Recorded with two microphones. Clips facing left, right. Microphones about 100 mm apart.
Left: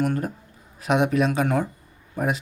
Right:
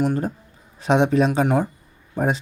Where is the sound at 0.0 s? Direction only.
20° right (ahead or behind).